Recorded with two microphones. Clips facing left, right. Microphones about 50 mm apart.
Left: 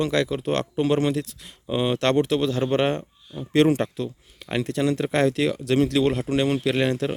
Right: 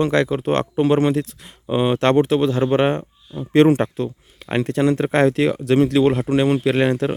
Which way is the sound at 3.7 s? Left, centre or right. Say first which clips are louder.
Right 5 dB; right.